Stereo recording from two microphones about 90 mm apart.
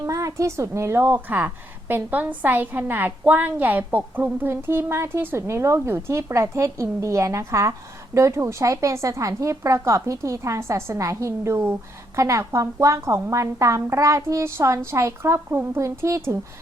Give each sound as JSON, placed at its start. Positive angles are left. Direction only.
{"t": 0.0, "sound": "a woman's voice", "side_deg": -35}